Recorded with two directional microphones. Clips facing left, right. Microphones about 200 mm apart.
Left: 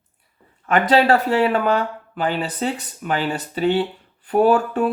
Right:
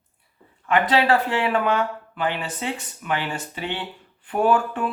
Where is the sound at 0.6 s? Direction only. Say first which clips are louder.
Left 4 dB; 45° left (ahead or behind).